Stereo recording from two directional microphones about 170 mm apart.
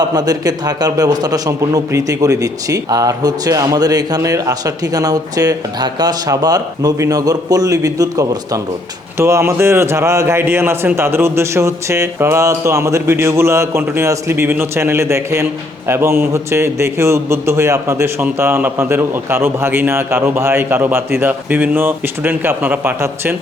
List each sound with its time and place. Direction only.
0.0 s a man's voice: 25° right (ahead or behind)